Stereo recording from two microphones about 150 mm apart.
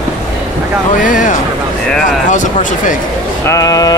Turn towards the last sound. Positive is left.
turn(degrees=25)  # may be behind; listen again after turning